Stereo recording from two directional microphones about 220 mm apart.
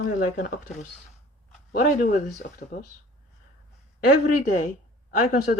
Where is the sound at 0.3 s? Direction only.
35° left (ahead or behind).